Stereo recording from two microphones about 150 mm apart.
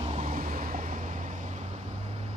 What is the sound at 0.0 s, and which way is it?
Vehicle, 45° right (ahead or behind).